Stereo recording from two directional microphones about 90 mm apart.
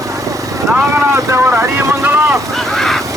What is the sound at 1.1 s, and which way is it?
Boat, 30° right (ahead or behind).